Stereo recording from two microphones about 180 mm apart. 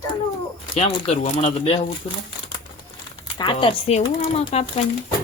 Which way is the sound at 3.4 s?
25° left (ahead or behind).